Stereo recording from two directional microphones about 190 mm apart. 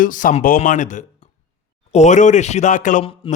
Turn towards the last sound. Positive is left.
turn(degrees=40)  # may be behind; listen again after turning